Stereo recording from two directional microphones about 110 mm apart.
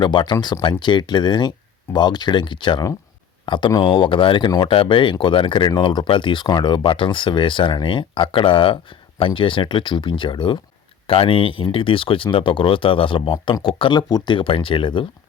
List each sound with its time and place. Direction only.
0.0 s speech: 45° left (ahead or behind)
11.0 s speech: 60° left (ahead or behind)